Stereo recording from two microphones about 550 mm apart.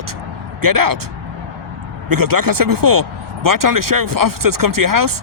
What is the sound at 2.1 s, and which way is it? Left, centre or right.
Speech, right.